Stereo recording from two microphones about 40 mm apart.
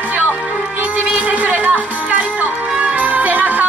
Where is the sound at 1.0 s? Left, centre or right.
Right.